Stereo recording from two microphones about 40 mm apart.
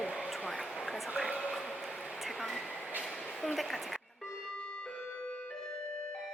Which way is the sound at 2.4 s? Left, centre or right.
Centre.